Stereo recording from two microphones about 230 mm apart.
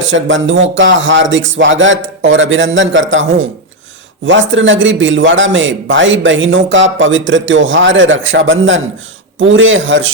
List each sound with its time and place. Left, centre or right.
0.0 s a man's voice: right